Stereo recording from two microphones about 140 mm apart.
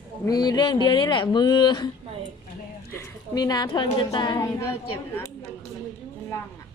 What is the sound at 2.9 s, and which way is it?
A woman's voice, 25° left (ahead or behind).